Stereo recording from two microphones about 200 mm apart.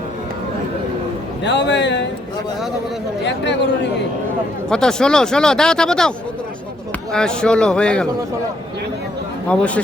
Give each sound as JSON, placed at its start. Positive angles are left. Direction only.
{"t": 1.5, "sound": "speech", "side_deg": 60}
{"t": 3.2, "sound": "speech", "side_deg": 60}
{"t": 4.7, "sound": "speech", "side_deg": 5}
{"t": 9.5, "sound": "a man's voice", "side_deg": 5}